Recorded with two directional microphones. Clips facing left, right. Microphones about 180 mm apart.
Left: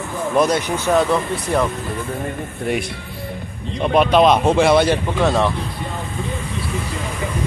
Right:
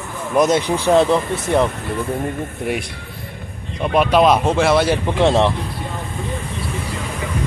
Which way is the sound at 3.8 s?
5° right (ahead or behind).